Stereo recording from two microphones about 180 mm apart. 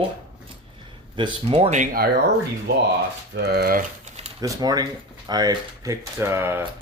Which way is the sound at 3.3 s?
60° right (ahead or behind).